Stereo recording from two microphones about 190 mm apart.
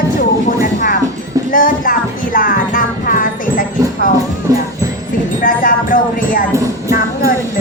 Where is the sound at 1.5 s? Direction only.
45° left (ahead or behind).